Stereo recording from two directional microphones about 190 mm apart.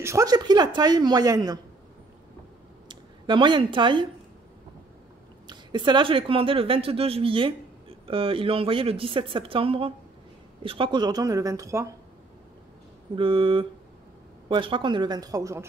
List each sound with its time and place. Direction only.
0.0 s speech: 15° right (ahead or behind)
2.9 s speech: 25° right (ahead or behind)
5.5 s speech: 25° right (ahead or behind)
13.1 s speech: 25° right (ahead or behind)